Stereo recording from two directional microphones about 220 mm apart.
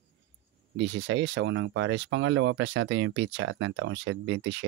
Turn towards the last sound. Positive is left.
turn(degrees=-55)  # may be behind; listen again after turning